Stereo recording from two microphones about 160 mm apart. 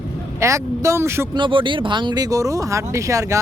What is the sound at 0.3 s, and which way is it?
Speech, 20° right (ahead or behind).